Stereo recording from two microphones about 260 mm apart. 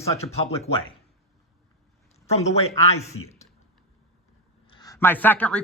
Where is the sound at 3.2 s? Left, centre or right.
Left.